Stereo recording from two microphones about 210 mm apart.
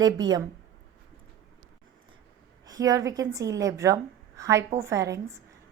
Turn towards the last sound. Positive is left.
turn(degrees=-15)  # may be behind; listen again after turning